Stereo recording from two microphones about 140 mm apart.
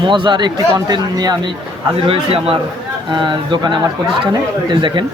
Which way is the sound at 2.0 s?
40° right (ahead or behind).